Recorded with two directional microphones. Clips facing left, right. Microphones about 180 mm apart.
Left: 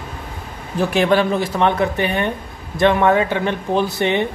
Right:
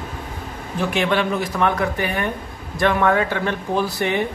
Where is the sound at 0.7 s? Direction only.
35° left (ahead or behind).